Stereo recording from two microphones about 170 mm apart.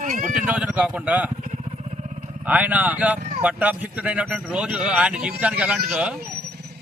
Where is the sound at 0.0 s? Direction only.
50° right (ahead or behind).